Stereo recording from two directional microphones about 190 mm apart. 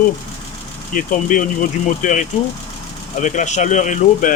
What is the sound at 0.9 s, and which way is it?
Speech, 45° left (ahead or behind).